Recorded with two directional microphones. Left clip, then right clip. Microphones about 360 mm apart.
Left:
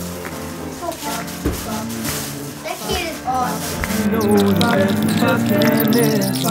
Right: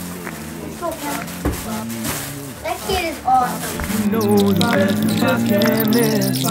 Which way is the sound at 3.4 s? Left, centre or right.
Centre.